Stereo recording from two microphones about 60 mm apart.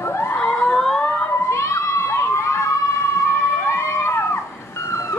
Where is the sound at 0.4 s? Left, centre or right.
Centre.